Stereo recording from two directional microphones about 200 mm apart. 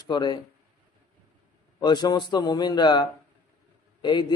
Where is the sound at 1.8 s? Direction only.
20° left (ahead or behind).